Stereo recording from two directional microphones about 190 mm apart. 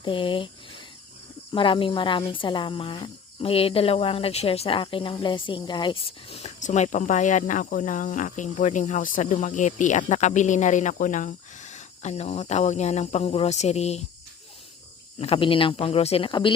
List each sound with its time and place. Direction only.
0.0 s speech: 25° left (ahead or behind)
1.5 s speech: 25° left (ahead or behind)
15.2 s speech: 30° left (ahead or behind)